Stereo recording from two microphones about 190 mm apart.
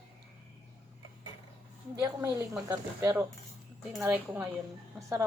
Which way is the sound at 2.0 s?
15° right (ahead or behind).